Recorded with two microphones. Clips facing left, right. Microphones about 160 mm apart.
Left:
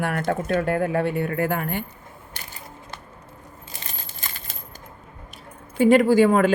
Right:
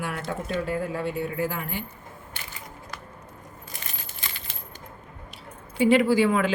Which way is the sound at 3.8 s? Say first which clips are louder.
Left 3 dB; 40° left (ahead or behind).